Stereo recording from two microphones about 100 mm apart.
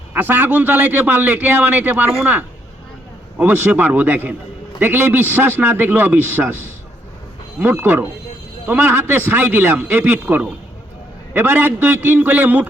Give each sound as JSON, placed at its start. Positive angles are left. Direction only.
{"t": 0.1, "sound": "a man's voice", "side_deg": -20}
{"t": 3.3, "sound": "a man's voice", "side_deg": -20}
{"t": 7.6, "sound": "a man's voice", "side_deg": -20}